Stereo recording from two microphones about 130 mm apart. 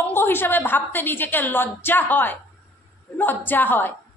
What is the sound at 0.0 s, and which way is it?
A woman's voice, 15° left (ahead or behind).